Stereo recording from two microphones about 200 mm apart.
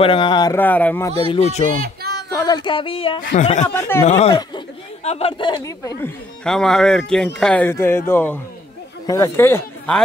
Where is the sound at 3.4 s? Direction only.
35° left (ahead or behind).